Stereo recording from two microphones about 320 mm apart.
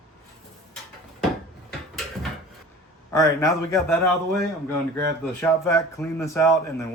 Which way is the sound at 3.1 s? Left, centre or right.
Centre.